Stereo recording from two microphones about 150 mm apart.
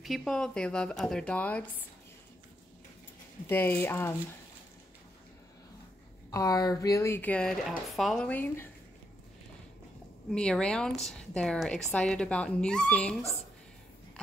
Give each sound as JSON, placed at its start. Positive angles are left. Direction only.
{"t": 0.0, "sound": "a woman's voice", "side_deg": 0}
{"t": 3.4, "sound": "speech", "side_deg": 15}
{"t": 6.3, "sound": "a woman's voice", "side_deg": 25}
{"t": 10.3, "sound": "a woman's voice", "side_deg": 5}